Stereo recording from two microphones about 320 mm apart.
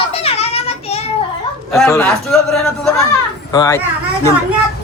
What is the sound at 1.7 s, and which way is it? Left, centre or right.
A man's voice, centre.